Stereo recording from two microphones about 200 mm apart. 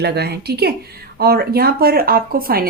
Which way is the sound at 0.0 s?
55° right (ahead or behind).